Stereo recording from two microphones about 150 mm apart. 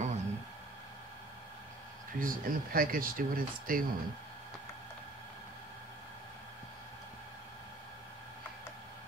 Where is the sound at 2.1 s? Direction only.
65° right (ahead or behind).